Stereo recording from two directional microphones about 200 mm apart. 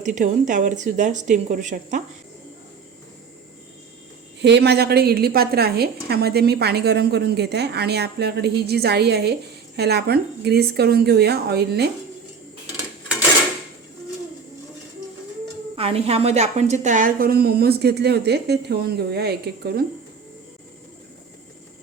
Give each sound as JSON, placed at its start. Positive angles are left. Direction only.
{"t": 0.0, "sound": "speech", "side_deg": -35}
{"t": 4.4, "sound": "a woman's voice", "side_deg": -60}
{"t": 15.7, "sound": "a woman's voice", "side_deg": -30}